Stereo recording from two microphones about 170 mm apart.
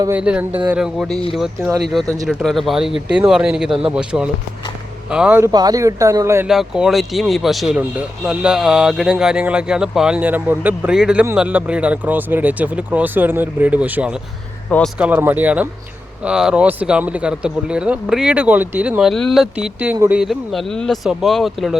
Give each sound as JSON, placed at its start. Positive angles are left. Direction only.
{"t": 0.2, "sound": "speech", "side_deg": -5}
{"t": 5.5, "sound": "speech", "side_deg": -20}
{"t": 6.5, "sound": "speech", "side_deg": 0}